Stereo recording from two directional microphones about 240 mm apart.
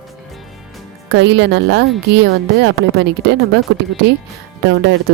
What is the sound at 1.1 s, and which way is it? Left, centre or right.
Speech, right.